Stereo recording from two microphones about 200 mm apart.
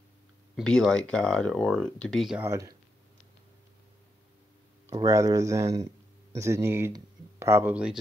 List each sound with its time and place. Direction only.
0.6 s speech: centre (ahead or behind)
2.5 s speech: 15° right (ahead or behind)
4.8 s speech: 15° right (ahead or behind)